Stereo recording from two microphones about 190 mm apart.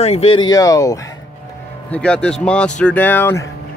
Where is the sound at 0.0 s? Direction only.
35° left (ahead or behind); by 1.0 s 15° left (ahead or behind).